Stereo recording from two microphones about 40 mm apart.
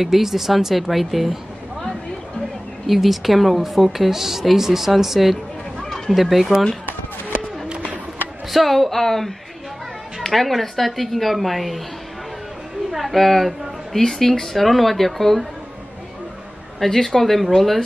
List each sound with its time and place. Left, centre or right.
0.0 s a woman's voice: centre
5.8 s a sound: centre
6.1 s a woman's voice: centre
7.6 s a sound: right
8.5 s a woman's voice: centre
12.9 s a woman's voice: centre
16.8 s a woman's voice: centre